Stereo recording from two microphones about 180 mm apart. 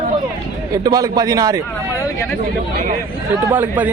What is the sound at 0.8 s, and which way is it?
Speech, 20° right (ahead or behind).